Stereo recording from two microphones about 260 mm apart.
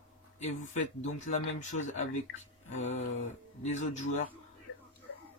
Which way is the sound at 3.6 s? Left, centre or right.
Left.